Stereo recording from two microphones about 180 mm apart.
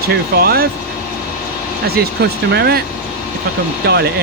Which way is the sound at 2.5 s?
65° right (ahead or behind).